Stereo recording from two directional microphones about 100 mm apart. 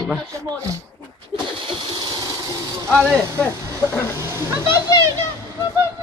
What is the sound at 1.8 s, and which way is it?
Train, 50° right (ahead or behind).